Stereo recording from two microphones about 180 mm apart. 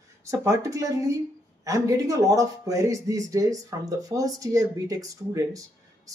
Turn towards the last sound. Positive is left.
turn(degrees=-20)  # may be behind; listen again after turning